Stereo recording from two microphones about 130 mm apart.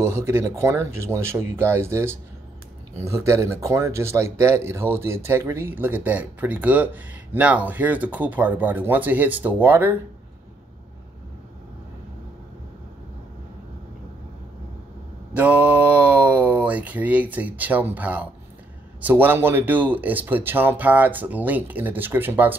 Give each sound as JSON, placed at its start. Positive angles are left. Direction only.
{"t": 0.0, "sound": "speech", "side_deg": -20}
{"t": 15.3, "sound": "speech", "side_deg": -10}